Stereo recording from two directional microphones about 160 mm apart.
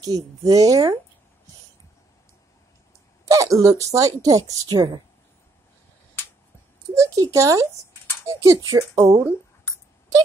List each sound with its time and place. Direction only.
0.0 s speech: 20° right (ahead or behind)
3.3 s speech: 20° right (ahead or behind)
7.0 s speech: 20° right (ahead or behind)